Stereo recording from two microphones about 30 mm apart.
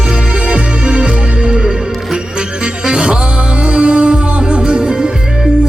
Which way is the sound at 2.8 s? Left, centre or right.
Right.